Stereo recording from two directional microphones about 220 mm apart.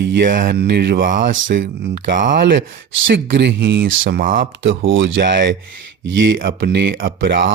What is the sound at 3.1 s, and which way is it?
Speech, 55° right (ahead or behind).